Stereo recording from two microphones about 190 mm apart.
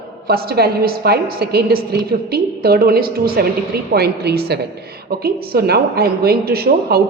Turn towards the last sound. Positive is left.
turn(degrees=-55)  # may be behind; listen again after turning